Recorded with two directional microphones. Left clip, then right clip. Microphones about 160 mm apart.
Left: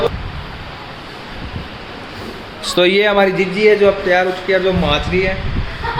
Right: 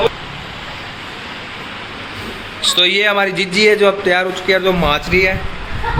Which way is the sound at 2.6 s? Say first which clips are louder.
Even; 40° left (ahead or behind).